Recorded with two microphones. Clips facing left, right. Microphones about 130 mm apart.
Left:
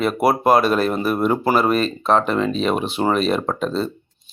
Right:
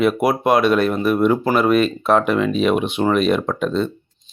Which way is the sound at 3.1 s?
30° left (ahead or behind).